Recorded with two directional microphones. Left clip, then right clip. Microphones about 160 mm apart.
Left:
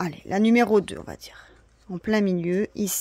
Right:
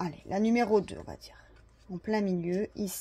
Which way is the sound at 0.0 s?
40° left (ahead or behind).